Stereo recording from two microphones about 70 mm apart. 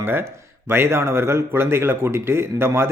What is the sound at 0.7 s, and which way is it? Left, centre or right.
A man's voice, right.